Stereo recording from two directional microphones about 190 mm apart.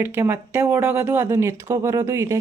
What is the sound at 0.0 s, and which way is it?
A woman's voice, 10° right (ahead or behind).